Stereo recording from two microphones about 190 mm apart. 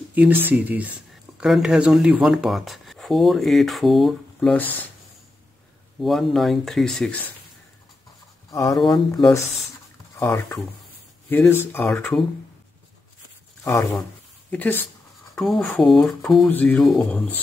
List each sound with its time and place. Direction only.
0.1 s speech: 10° right (ahead or behind); by 4.7 s 5° left (ahead or behind)
5.9 s speech: centre (ahead or behind)
8.5 s speech: 15° left (ahead or behind)
8.7 s speech: centre (ahead or behind)
9.1 s speech: 15° left (ahead or behind)
14.5 s speech: 10° left (ahead or behind)